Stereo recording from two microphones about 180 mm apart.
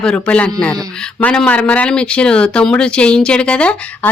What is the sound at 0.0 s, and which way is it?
Speech, 5° left (ahead or behind).